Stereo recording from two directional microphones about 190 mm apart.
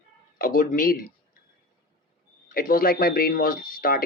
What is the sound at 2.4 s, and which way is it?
Speech, 50° left (ahead or behind).